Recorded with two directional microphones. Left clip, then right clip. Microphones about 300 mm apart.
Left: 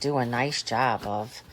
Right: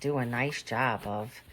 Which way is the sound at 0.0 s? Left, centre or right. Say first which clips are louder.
Left 4 dB; centre.